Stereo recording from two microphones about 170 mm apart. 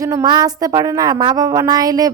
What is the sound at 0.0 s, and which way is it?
Speech, 20° right (ahead or behind).